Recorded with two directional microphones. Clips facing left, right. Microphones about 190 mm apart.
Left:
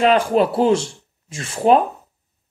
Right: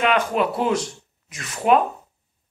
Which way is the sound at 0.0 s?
35° left (ahead or behind).